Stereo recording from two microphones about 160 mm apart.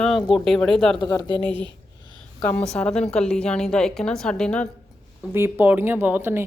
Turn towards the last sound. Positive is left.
turn(degrees=-15)  # may be behind; listen again after turning